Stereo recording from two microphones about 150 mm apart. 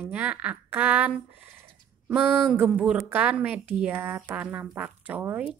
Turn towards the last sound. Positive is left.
turn(degrees=-10)  # may be behind; listen again after turning